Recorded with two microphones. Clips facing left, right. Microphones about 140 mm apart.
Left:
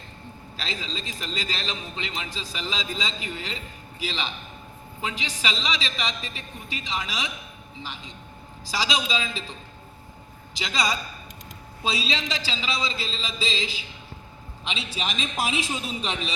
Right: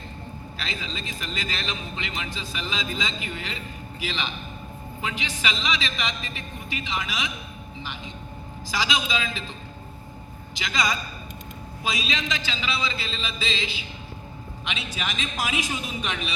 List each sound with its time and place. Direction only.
0.5 s a man's voice: 35° left (ahead or behind)
10.5 s a man's voice: 30° left (ahead or behind)